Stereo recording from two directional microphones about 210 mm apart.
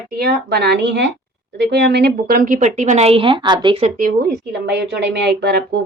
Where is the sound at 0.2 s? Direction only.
50° right (ahead or behind); by 3.9 s 25° right (ahead or behind).